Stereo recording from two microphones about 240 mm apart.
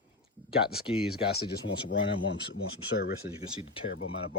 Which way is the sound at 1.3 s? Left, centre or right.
Left.